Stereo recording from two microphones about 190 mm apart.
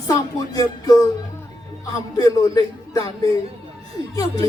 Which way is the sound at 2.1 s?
20° left (ahead or behind).